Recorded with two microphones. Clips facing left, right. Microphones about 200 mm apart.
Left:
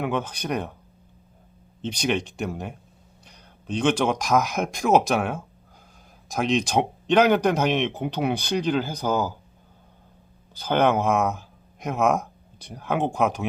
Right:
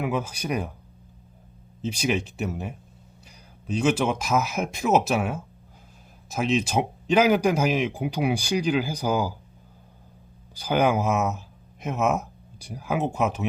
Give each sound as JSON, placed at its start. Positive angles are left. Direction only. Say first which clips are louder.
{"t": 0.0, "sound": "speech", "louder": "left 1 dB", "side_deg": -5}
{"t": 1.8, "sound": "speech", "louder": "even", "side_deg": -5}
{"t": 10.5, "sound": "speech", "louder": "left 1 dB", "side_deg": -10}